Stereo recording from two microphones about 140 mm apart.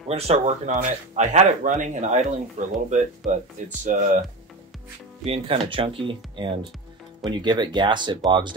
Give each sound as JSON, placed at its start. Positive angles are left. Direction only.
{"t": 0.1, "sound": "speech", "side_deg": -50}
{"t": 5.2, "sound": "speech", "side_deg": -45}